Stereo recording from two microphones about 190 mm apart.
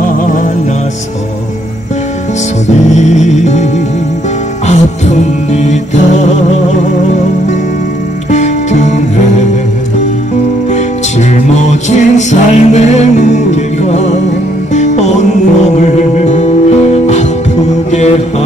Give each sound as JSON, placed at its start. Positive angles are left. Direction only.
{"t": 2.9, "sound": "music", "side_deg": 40}
{"t": 4.6, "sound": "music", "side_deg": 35}
{"t": 8.3, "sound": "music", "side_deg": 40}
{"t": 11.4, "sound": "music", "side_deg": 40}
{"t": 17.9, "sound": "mantra", "side_deg": 35}